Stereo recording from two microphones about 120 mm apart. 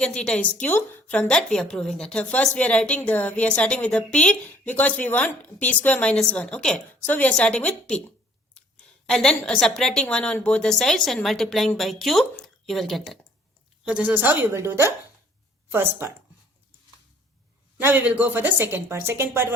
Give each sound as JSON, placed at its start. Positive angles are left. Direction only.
{"t": 0.0, "sound": "a woman's voice", "side_deg": 5}
{"t": 9.0, "sound": "a woman's voice", "side_deg": 5}
{"t": 13.8, "sound": "a woman's voice", "side_deg": -15}
{"t": 17.7, "sound": "a woman's voice", "side_deg": -15}